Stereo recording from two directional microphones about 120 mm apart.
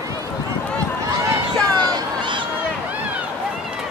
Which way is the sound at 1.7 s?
35° right (ahead or behind).